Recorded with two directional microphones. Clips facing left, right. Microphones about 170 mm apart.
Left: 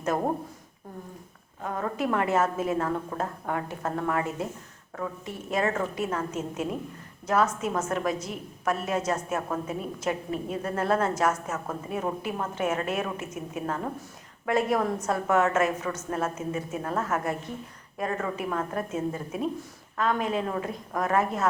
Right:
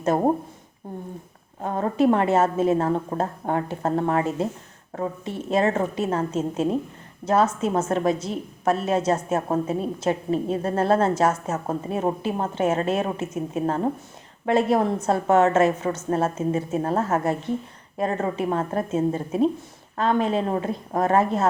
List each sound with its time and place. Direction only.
1.6 s a woman's voice: 30° right (ahead or behind)